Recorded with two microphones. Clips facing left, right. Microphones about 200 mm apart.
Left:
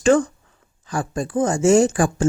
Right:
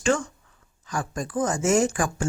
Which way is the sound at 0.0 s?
35° left (ahead or behind).